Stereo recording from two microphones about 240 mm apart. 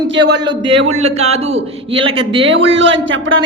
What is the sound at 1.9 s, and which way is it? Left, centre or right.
Speech, right.